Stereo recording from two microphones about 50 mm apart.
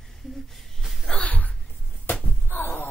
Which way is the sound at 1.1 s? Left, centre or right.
Left.